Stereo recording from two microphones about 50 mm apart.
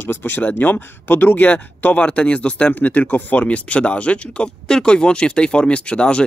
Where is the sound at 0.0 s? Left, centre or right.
Left.